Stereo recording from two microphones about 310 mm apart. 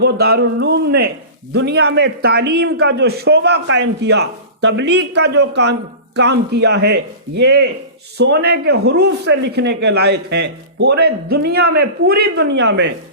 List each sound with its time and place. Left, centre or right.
0.0 s speech: right